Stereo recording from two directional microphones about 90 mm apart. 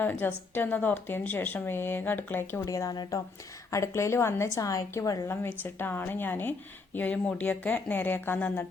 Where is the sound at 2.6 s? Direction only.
40° left (ahead or behind).